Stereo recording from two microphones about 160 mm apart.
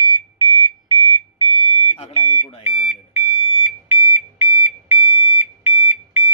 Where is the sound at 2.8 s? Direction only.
15° right (ahead or behind).